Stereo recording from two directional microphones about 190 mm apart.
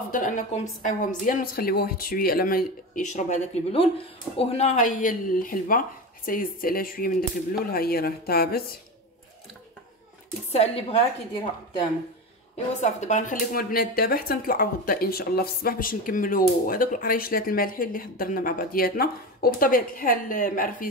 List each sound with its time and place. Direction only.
0.1 s speech: 45° left (ahead or behind)
10.5 s a woman's voice: 35° left (ahead or behind)
12.8 s speech: 40° left (ahead or behind)